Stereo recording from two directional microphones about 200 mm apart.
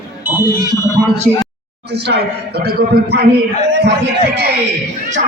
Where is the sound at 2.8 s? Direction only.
50° right (ahead or behind).